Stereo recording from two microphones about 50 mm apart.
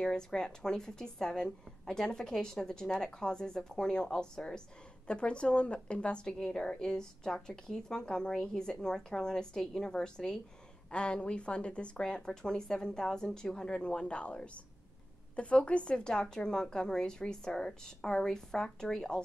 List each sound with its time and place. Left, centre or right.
0.0 s a woman's voice: centre
5.0 s a woman's voice: left